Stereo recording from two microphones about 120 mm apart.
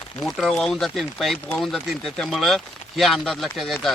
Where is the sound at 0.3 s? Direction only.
5° left (ahead or behind).